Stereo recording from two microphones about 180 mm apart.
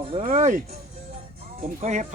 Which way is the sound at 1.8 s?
40° right (ahead or behind).